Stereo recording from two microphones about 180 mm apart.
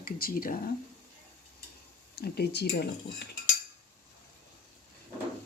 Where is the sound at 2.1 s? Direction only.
65° left (ahead or behind).